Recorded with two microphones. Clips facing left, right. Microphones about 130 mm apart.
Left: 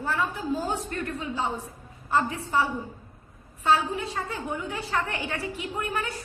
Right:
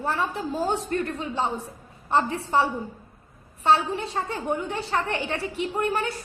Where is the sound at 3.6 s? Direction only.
30° right (ahead or behind).